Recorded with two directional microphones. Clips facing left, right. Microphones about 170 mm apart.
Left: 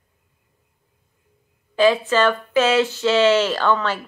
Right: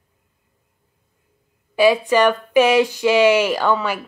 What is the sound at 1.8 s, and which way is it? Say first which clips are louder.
Speech: right 2 dB; 15° right (ahead or behind).